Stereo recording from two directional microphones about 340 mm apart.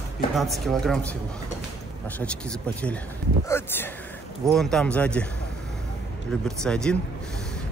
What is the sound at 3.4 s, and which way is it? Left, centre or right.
Speech, centre.